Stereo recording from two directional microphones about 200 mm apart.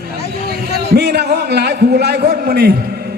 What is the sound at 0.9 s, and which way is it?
A man's voice, 55° right (ahead or behind).